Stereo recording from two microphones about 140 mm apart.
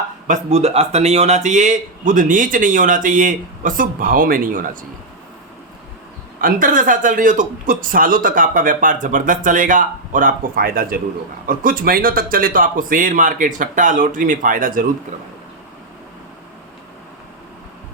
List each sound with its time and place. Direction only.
0.3 s speech: 50° right (ahead or behind); by 4.8 s 75° right (ahead or behind)
6.4 s speech: 75° right (ahead or behind)